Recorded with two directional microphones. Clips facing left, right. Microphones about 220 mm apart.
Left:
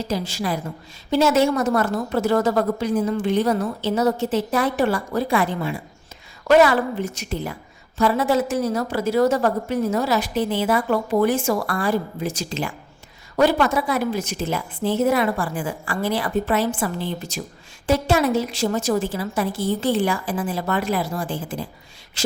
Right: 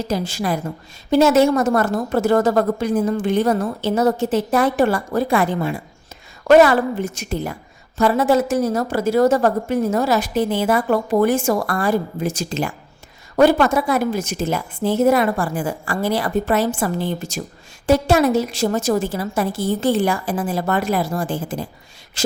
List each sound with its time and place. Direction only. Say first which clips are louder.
0.1 s a woman's voice: right 3 dB; 50° right (ahead or behind)